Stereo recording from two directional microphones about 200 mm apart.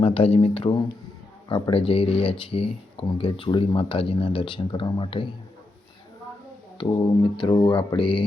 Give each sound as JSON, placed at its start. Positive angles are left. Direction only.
{"t": 0.0, "sound": "speech", "side_deg": 30}
{"t": 6.7, "sound": "speech", "side_deg": 20}